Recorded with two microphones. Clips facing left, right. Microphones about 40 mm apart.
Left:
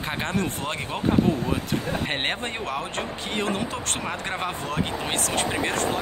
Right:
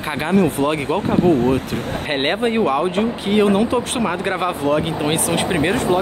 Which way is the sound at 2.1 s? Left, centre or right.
Centre.